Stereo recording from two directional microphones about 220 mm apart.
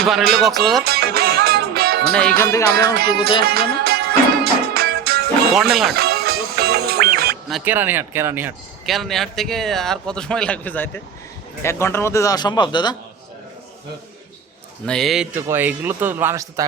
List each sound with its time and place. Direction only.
0.0 s speech: centre (ahead or behind)
0.9 s music: 45° right (ahead or behind)
2.4 s a man's voice: 15° left (ahead or behind)
3.4 s music: 45° right (ahead or behind)
7.5 s a man's voice: 10° right (ahead or behind); by 13.0 s 20° left (ahead or behind)
14.8 s a man's voice: centre (ahead or behind); by 16.6 s 15° right (ahead or behind)